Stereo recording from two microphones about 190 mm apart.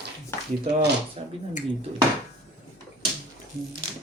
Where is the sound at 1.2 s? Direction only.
30° right (ahead or behind).